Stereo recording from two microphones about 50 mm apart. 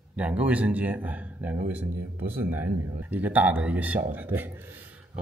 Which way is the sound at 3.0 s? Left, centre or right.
Right.